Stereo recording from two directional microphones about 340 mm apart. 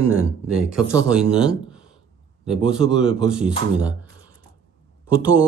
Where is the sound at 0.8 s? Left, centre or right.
Centre.